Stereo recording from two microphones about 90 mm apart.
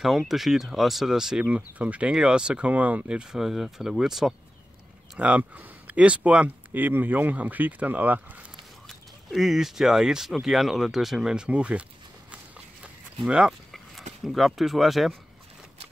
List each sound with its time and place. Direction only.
0.3 s speech: 5° right (ahead or behind)
5.2 s speech: 15° right (ahead or behind)
8.8 s speech: centre (ahead or behind)
13.3 s speech: 5° right (ahead or behind)